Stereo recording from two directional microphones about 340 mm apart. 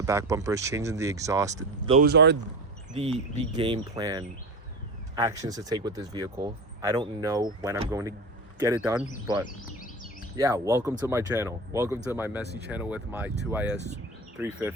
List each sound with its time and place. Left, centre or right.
0.0 s speech: centre
2.0 s speech: right
3.3 s speech: centre
10.3 s speech: centre
12.5 s speech: right
12.7 s speech: centre
13.7 s speech: centre
14.3 s speech: centre